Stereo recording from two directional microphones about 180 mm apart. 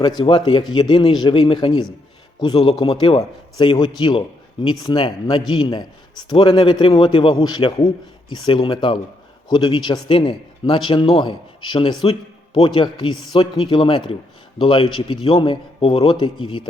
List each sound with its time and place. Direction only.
0.2 s a man's voice: 25° left (ahead or behind)